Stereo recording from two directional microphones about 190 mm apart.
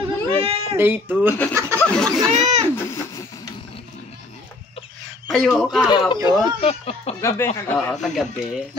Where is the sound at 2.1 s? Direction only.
20° right (ahead or behind).